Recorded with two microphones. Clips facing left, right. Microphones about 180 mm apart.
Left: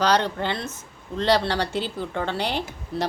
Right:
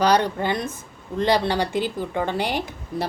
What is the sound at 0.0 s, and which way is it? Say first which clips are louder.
Speech: right 2 dB; 10° right (ahead or behind).